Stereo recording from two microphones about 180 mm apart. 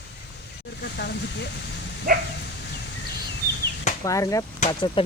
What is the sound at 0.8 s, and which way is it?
Speech, 70° left (ahead or behind).